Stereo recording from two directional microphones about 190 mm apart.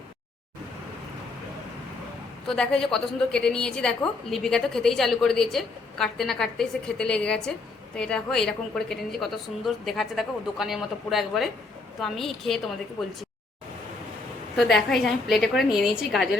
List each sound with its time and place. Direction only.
2.5 s a woman's voice: 5° left (ahead or behind)
14.5 s a woman's voice: centre (ahead or behind)